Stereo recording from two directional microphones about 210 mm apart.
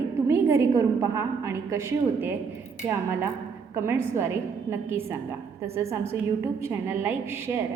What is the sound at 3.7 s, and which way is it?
A woman's voice, 10° right (ahead or behind).